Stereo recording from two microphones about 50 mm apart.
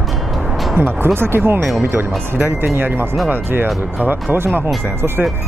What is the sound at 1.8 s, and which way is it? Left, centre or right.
Speech, right.